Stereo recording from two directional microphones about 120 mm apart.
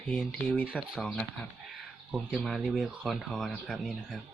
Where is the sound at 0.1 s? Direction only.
Centre (ahead or behind).